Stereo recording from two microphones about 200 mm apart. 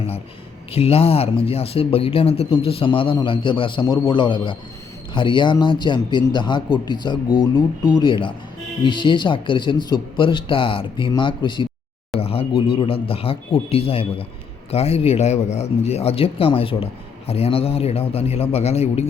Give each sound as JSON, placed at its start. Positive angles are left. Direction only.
{"t": 0.7, "sound": "speech", "side_deg": 30}